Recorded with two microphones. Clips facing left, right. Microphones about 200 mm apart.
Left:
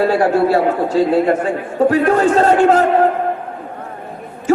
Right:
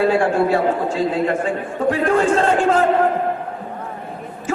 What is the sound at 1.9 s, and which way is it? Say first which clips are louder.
Speech: left 1 dB; 40° left (ahead or behind).